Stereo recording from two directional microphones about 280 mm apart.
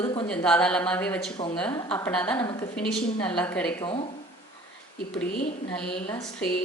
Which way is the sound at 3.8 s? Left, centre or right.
Centre.